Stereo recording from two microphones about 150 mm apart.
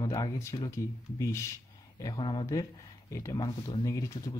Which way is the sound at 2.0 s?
30° left (ahead or behind).